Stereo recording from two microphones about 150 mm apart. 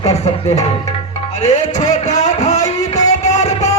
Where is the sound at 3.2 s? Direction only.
50° left (ahead or behind).